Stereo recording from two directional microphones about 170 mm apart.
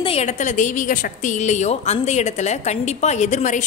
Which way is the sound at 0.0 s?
40° left (ahead or behind).